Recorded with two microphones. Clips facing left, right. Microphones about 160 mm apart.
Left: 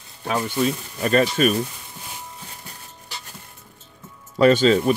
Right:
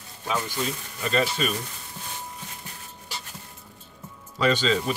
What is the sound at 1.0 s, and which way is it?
Speech, 55° left (ahead or behind).